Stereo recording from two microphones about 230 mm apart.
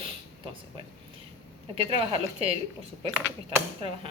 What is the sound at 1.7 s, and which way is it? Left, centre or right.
Speech, right.